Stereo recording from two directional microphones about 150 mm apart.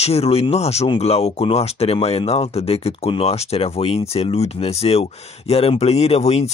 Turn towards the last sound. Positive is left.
turn(degrees=45)  # may be behind; listen again after turning